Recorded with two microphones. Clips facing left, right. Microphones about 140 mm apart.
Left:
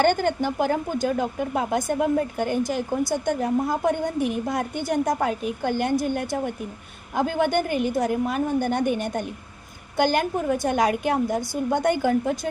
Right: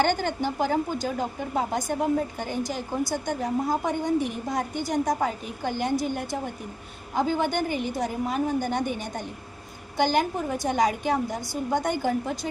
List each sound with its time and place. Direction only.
0.0 s a woman's voice: 50° left (ahead or behind)